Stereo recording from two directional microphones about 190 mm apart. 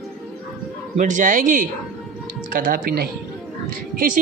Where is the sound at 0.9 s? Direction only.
40° right (ahead or behind).